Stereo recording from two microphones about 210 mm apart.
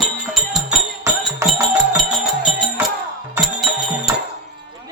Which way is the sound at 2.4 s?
Centre (ahead or behind).